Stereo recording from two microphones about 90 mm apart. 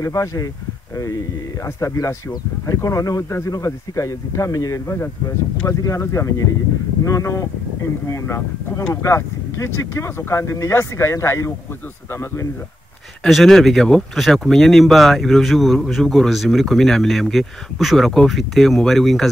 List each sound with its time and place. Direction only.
0.0 s a man's voice: 35° left (ahead or behind)
1.8 s a man's voice: 35° left (ahead or behind)
13.2 s speech: centre (ahead or behind)